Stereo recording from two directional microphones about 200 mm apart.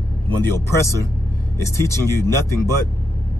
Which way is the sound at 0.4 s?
15° left (ahead or behind).